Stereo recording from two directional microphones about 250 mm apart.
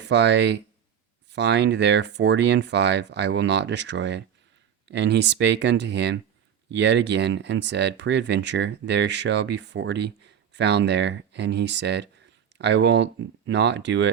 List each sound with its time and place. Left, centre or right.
0.0 s speech: right